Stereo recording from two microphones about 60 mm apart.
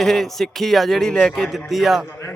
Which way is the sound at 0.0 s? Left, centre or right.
Centre.